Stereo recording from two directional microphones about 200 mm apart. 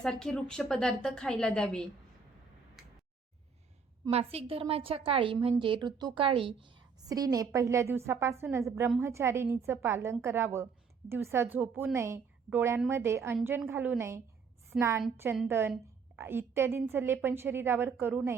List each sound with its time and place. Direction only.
0.0 s a woman's voice: 5° left (ahead or behind)
2.8 s a sound: centre (ahead or behind)
4.1 s a woman's voice: 30° right (ahead or behind); by 18.3 s 5° right (ahead or behind)